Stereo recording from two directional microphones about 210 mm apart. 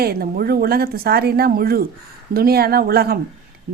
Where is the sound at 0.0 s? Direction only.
45° right (ahead or behind).